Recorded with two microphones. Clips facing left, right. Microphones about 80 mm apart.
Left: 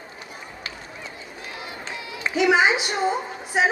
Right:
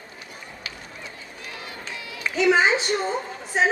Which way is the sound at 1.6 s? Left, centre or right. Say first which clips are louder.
Left 2 dB; left.